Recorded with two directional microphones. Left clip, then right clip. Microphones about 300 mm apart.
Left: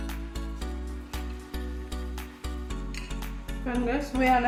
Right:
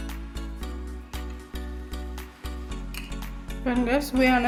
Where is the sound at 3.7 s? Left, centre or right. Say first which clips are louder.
Right 5 dB; right.